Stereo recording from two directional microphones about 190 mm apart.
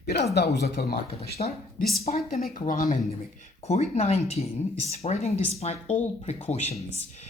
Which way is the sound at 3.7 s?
35° left (ahead or behind).